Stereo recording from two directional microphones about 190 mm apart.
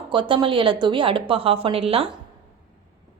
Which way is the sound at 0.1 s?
25° right (ahead or behind).